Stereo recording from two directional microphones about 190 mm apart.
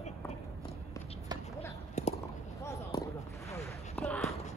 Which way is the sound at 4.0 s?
5° left (ahead or behind).